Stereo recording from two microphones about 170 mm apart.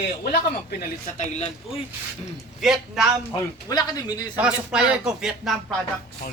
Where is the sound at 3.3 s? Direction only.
20° left (ahead or behind).